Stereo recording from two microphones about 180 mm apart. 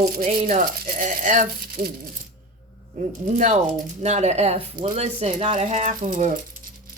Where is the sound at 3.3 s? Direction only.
40° right (ahead or behind).